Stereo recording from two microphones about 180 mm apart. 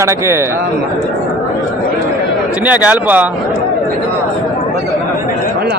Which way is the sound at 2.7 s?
10° right (ahead or behind).